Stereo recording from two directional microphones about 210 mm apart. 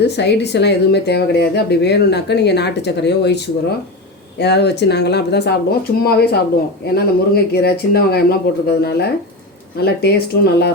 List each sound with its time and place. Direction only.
0.0 s speech: 50° left (ahead or behind)